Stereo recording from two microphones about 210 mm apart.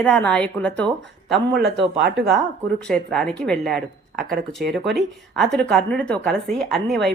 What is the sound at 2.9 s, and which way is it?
Speech, 5° left (ahead or behind).